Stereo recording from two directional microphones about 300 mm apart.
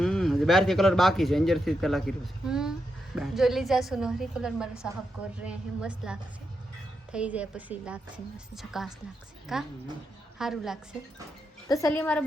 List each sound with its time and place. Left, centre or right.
0.0 s a woman's voice: centre
11.9 s a woman's voice: centre